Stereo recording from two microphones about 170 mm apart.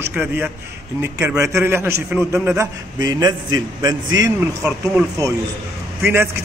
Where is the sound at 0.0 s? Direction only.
10° right (ahead or behind).